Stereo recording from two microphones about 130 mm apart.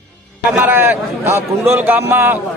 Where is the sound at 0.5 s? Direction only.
15° right (ahead or behind).